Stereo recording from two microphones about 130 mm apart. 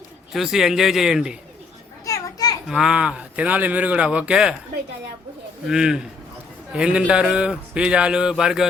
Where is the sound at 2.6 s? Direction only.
5° right (ahead or behind).